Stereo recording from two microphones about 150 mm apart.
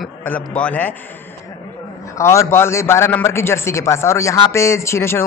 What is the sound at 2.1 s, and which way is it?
A man's voice, 20° left (ahead or behind).